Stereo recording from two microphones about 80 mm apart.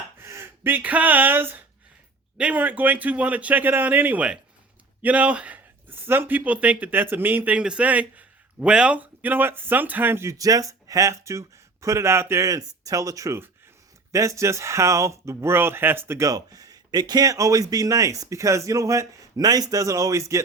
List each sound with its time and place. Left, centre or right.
0.2 s a man's voice: right
10.3 s speech: right
16.3 s speech: right